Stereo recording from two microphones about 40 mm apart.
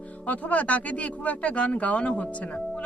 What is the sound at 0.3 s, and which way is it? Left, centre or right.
Speech, left.